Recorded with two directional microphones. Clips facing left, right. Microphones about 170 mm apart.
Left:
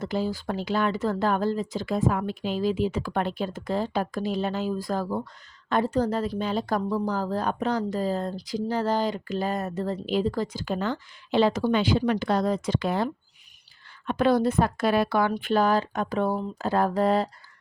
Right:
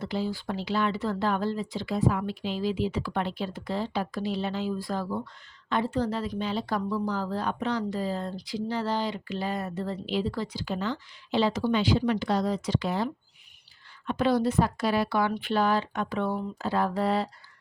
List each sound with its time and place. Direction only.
0.0 s a woman's voice: 45° left (ahead or behind)
14.1 s a woman's voice: 55° left (ahead or behind)